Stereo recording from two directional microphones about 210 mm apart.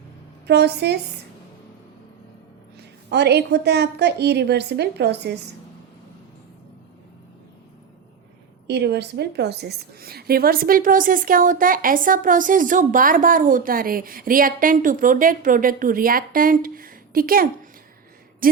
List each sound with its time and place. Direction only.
0.4 s a woman's voice: 50° right (ahead or behind)
3.1 s a woman's voice: 50° right (ahead or behind)
8.6 s a woman's voice: 50° right (ahead or behind)